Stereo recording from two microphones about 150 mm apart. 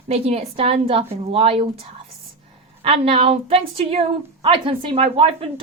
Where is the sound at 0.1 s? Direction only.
45° right (ahead or behind).